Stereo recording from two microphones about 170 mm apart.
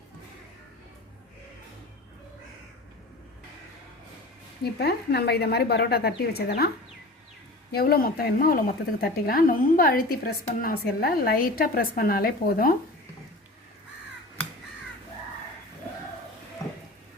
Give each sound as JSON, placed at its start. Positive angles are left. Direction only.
{"t": 4.6, "sound": "speech", "side_deg": 70}
{"t": 7.7, "sound": "speech", "side_deg": 65}